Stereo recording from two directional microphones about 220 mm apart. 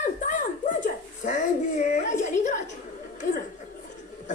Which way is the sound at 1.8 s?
35° left (ahead or behind).